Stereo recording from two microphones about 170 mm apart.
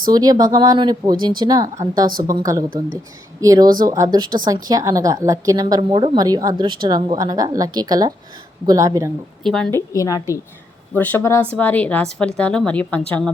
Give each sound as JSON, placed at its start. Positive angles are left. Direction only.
{"t": 0.1, "sound": "a woman's voice", "side_deg": -25}
{"t": 2.0, "sound": "a woman's voice", "side_deg": -55}
{"t": 2.3, "sound": "a woman's voice", "side_deg": -20}
{"t": 9.4, "sound": "a woman's voice", "side_deg": 5}